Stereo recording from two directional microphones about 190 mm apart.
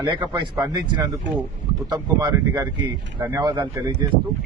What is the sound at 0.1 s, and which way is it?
Speech, 25° right (ahead or behind).